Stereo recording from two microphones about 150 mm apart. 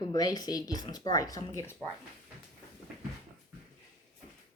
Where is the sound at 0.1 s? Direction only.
25° left (ahead or behind).